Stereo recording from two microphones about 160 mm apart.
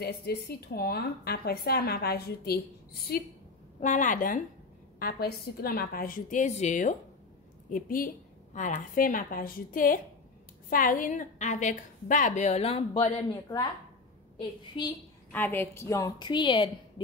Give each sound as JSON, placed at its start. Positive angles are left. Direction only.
{"t": 0.0, "sound": "a woman's voice", "side_deg": 85}
{"t": 3.8, "sound": "a woman's voice", "side_deg": 50}
{"t": 4.9, "sound": "a woman's voice", "side_deg": 70}
{"t": 14.4, "sound": "a woman's voice", "side_deg": 25}
{"t": 15.3, "sound": "a woman's voice", "side_deg": 10}